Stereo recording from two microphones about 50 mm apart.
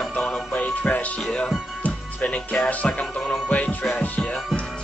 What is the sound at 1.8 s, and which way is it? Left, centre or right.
Music, left.